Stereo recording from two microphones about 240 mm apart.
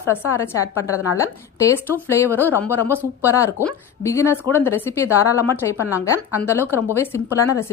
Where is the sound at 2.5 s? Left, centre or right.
Centre.